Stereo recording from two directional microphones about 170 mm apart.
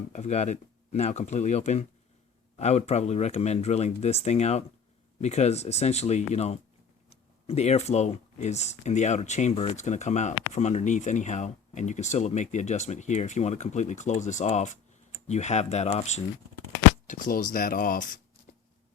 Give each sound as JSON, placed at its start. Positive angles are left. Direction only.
{"t": 0.1, "sound": "speech", "side_deg": 40}
{"t": 17.1, "sound": "speech", "side_deg": 50}